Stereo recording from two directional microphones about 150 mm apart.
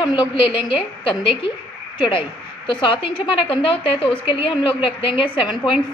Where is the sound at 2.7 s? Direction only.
35° left (ahead or behind).